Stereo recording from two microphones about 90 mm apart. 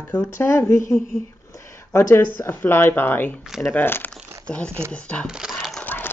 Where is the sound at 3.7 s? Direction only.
20° left (ahead or behind).